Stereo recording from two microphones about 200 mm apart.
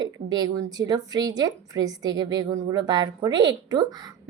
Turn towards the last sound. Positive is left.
turn(degrees=-20)  # may be behind; listen again after turning